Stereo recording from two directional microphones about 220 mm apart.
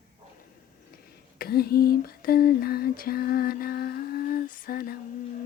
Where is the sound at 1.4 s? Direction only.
45° left (ahead or behind).